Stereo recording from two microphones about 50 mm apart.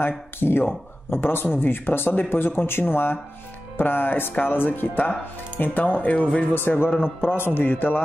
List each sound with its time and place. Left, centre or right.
0.4 s speech: left
6.5 s speech: left